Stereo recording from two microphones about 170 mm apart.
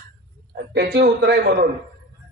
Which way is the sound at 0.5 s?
80° right.